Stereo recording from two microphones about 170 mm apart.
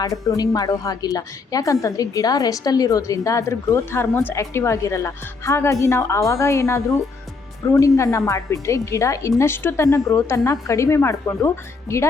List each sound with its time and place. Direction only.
0.0 s a woman's voice: 20° left (ahead or behind)